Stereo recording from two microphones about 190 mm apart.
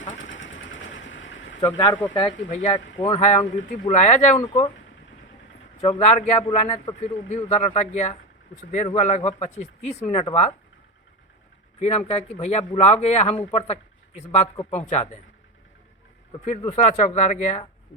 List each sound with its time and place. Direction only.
0.1 s engine: 90° left
1.6 s speech: 25° left (ahead or behind)
2.5 s speech: 40° left (ahead or behind)
5.8 s speech: 30° left (ahead or behind)
11.8 s speech: 35° left (ahead or behind)
16.5 s speech: 40° left (ahead or behind)